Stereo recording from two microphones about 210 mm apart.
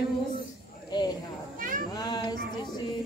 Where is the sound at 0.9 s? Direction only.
20° left (ahead or behind).